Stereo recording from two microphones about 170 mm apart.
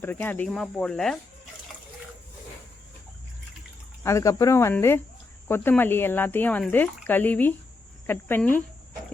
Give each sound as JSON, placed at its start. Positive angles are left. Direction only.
{"t": 0.0, "sound": "speech", "side_deg": 10}
{"t": 4.0, "sound": "speech", "side_deg": 15}